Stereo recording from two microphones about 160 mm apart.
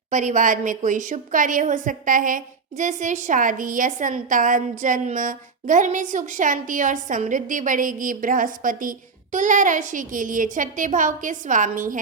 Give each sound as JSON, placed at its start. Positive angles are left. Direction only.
{"t": 0.1, "sound": "a woman's voice", "side_deg": -50}